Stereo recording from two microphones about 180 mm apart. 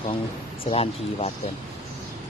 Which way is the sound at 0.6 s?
30° left (ahead or behind).